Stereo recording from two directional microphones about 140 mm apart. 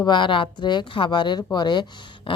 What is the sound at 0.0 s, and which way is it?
Speech, 35° left (ahead or behind).